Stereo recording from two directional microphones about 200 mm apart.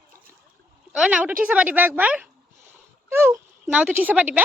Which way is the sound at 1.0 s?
5° right (ahead or behind).